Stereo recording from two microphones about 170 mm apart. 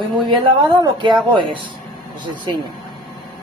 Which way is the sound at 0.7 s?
25° right (ahead or behind).